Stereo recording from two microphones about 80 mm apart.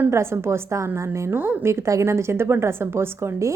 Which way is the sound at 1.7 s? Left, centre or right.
Right.